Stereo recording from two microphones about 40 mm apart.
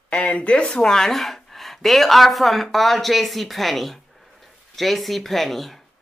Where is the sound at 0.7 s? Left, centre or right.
Centre.